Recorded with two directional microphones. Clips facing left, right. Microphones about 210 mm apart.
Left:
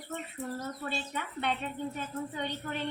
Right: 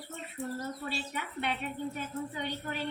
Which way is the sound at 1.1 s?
10° right (ahead or behind).